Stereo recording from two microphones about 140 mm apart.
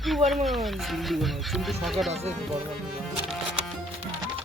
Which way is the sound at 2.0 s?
50° right (ahead or behind).